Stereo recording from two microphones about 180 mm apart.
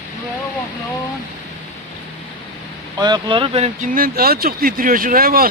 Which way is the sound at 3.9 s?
55° right (ahead or behind).